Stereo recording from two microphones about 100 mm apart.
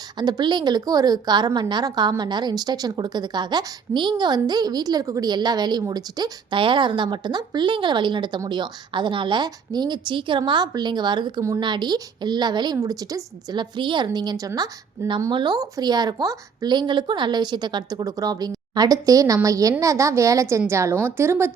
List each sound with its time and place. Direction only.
0.2 s a woman's voice: 45° right (ahead or behind)
6.6 s a woman's voice: 55° right (ahead or behind); by 16.7 s 40° right (ahead or behind)
16.7 s a woman's voice: 50° right (ahead or behind); by 21.5 s 25° right (ahead or behind)